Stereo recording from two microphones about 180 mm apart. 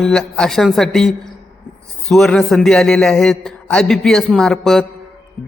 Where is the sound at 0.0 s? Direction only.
5° left (ahead or behind).